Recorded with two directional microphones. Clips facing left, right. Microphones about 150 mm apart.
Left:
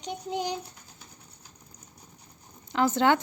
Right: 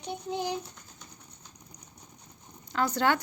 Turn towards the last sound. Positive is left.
turn(degrees=20)  # may be behind; listen again after turning